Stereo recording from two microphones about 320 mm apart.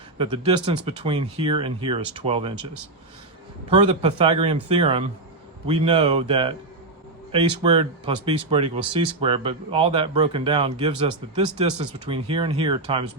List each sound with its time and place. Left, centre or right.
0.2 s speech: centre
3.7 s speech: centre